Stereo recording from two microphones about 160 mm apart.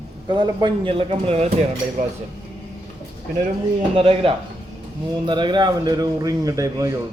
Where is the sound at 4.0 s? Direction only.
35° right (ahead or behind).